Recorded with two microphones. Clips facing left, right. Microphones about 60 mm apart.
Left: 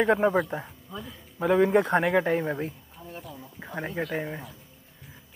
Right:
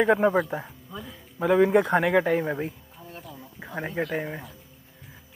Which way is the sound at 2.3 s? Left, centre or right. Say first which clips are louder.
Right 1 dB; centre.